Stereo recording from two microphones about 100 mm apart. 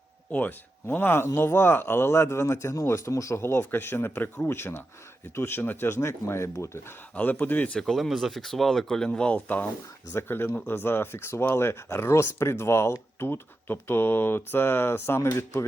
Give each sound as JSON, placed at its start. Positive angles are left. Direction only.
{"t": 0.3, "sound": "speech", "side_deg": 15}
{"t": 7.2, "sound": "speech", "side_deg": 15}